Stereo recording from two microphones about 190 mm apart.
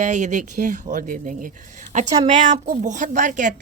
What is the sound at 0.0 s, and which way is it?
A woman's voice, 40° right (ahead or behind).